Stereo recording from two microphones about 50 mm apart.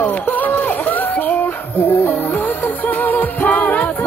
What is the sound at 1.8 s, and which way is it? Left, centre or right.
Music, left.